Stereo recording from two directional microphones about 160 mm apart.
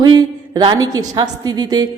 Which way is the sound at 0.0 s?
25° right (ahead or behind).